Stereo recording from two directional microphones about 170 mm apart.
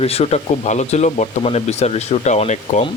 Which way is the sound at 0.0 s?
35° left (ahead or behind).